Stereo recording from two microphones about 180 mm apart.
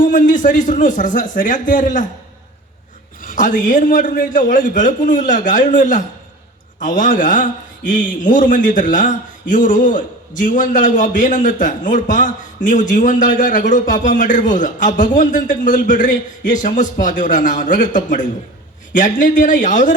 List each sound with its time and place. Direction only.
0.0 s a man's voice: 45° left (ahead or behind)
3.2 s a man's voice: 45° left (ahead or behind)